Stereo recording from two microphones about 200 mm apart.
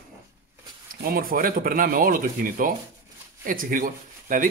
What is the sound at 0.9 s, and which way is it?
Speech, 45° right (ahead or behind).